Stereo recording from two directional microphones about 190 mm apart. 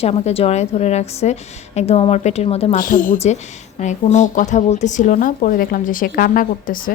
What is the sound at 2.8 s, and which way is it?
Speech, 45° left (ahead or behind).